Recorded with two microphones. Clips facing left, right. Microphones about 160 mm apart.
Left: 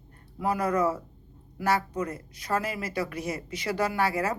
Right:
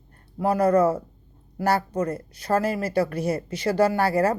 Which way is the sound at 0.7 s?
50° right (ahead or behind).